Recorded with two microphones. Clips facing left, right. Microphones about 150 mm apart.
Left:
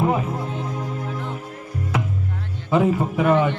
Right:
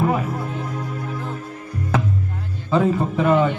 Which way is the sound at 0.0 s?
20° left (ahead or behind).